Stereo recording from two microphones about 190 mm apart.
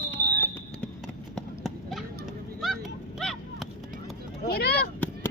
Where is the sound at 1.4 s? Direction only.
Centre (ahead or behind).